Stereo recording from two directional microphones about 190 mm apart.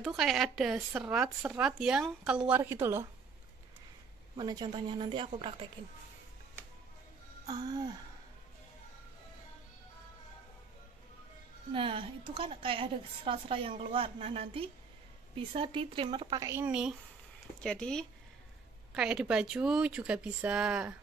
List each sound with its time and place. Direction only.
0.0 s speech: centre (ahead or behind)
4.4 s a woman's voice: 20° right (ahead or behind)
7.4 s a woman's voice: 20° right (ahead or behind)
11.7 s a woman's voice: 25° right (ahead or behind); by 16.9 s 5° right (ahead or behind)
17.6 s speech: 5° left (ahead or behind)